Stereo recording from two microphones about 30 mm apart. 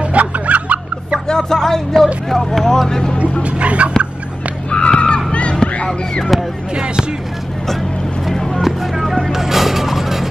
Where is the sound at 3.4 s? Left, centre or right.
Right.